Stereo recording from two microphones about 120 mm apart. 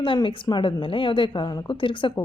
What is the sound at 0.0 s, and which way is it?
Speech, 45° left (ahead or behind).